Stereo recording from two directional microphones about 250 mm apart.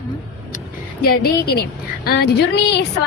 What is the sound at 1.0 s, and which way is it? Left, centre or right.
A woman's voice, left.